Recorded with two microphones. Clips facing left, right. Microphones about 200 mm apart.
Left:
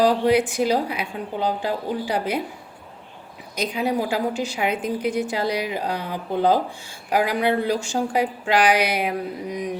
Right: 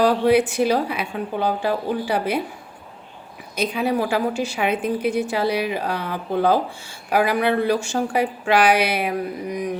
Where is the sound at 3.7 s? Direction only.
15° left (ahead or behind).